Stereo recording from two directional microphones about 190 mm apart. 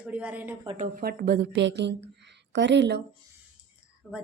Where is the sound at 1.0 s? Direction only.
50° right (ahead or behind).